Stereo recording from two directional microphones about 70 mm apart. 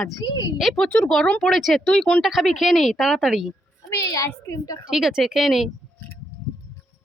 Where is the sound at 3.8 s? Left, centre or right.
Left.